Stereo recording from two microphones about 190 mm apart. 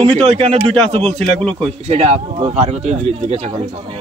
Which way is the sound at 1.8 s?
35° right (ahead or behind).